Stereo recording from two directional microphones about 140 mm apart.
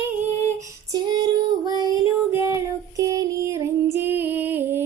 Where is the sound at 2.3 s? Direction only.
20° right (ahead or behind).